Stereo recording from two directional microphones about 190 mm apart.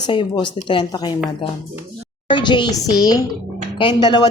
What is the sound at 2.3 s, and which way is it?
Speech, 25° left (ahead or behind).